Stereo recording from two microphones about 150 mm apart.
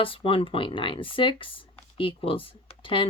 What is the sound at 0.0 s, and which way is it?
Speech, 35° left (ahead or behind).